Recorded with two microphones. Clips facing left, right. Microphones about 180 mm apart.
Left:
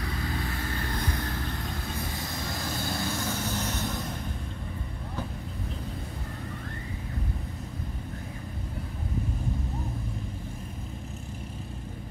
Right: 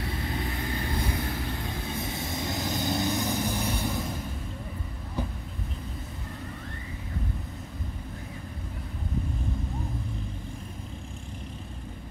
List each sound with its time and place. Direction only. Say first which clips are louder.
0.0 s vehicle: right 1 dB; 25° right (ahead or behind)
2.0 s vehicle: right 2 dB; 25° right (ahead or behind)